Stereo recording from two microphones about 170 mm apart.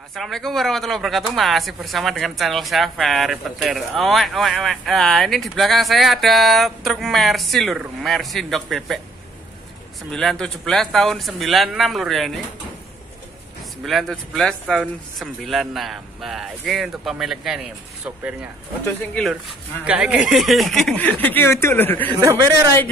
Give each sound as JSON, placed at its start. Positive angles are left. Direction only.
{"t": 0.1, "sound": "speech", "side_deg": 0}
{"t": 10.1, "sound": "speech", "side_deg": 5}
{"t": 13.8, "sound": "speech", "side_deg": 0}
{"t": 18.9, "sound": "speech", "side_deg": 5}
{"t": 19.8, "sound": "speech", "side_deg": -10}
{"t": 22.1, "sound": "speech", "side_deg": -15}